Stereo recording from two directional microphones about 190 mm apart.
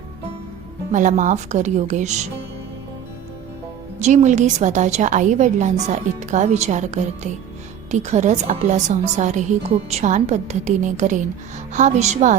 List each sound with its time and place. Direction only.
0.9 s a woman's voice: 40° right (ahead or behind)
4.0 s a woman's voice: 40° right (ahead or behind)